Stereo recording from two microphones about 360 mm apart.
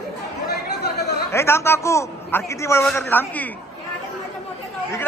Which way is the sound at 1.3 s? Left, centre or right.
Centre.